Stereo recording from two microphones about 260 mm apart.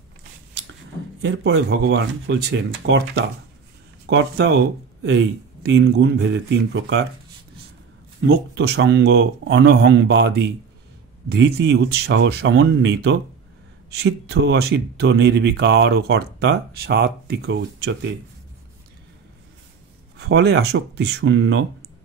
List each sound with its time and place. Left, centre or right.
1.2 s speech: right
8.2 s speech: right
20.2 s speech: right